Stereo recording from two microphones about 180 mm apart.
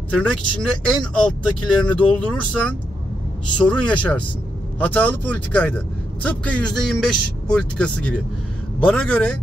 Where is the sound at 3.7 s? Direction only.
5° left (ahead or behind).